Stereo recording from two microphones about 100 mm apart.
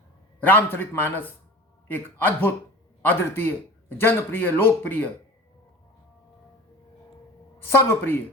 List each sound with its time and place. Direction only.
0.3 s a man's voice: 20° left (ahead or behind)
7.8 s speech: 25° left (ahead or behind)